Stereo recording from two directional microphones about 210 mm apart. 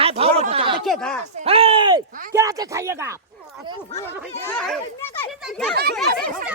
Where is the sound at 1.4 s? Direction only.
25° right (ahead or behind).